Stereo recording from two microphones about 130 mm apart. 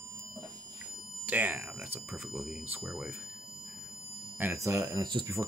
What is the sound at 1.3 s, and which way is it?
Speech, 15° right (ahead or behind).